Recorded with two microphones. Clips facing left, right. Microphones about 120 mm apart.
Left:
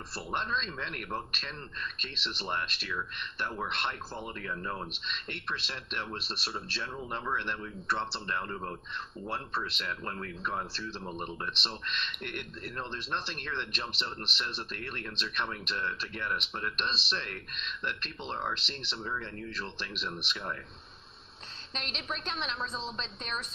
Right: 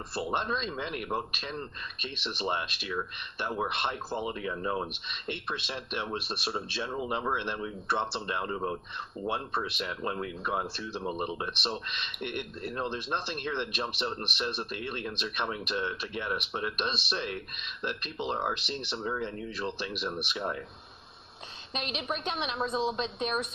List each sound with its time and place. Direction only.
0.1 s speech: 15° right (ahead or behind)
21.7 s speech: 10° right (ahead or behind)